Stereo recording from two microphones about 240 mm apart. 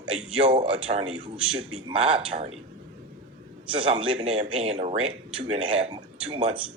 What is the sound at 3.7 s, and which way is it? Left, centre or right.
Speech, right.